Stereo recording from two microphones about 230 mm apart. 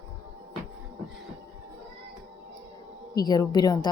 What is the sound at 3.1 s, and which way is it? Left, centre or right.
Speech, centre.